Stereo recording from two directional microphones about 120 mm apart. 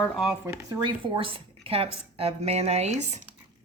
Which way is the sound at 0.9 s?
45° right (ahead or behind).